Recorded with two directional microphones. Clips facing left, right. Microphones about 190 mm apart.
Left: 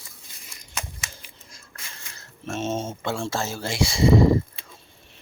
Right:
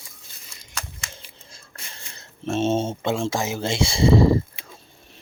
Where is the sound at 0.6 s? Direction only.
20° left (ahead or behind).